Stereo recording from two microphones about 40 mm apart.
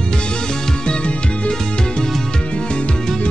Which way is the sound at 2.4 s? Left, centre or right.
Left.